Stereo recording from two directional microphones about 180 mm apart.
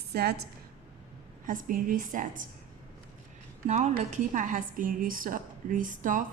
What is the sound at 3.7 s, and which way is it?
A woman's voice, 40° right (ahead or behind).